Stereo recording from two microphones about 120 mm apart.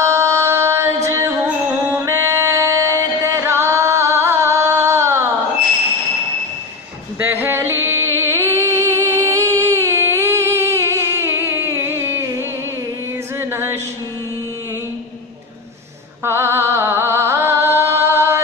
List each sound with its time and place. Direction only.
0.0 s music: 25° right (ahead or behind)
7.2 s a sound: 15° right (ahead or behind)
16.3 s music: 20° right (ahead or behind)